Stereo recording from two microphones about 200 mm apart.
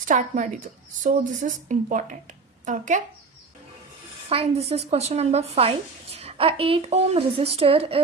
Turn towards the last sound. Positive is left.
turn(degrees=-30)  # may be behind; listen again after turning